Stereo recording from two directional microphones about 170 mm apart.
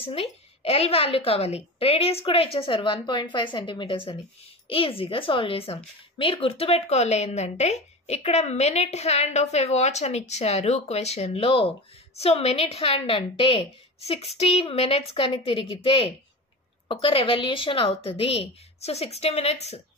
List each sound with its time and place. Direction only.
0.0 s a woman's voice: 35° left (ahead or behind)